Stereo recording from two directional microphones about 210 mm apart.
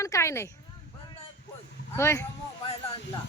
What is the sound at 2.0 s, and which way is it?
Speech, 10° left (ahead or behind).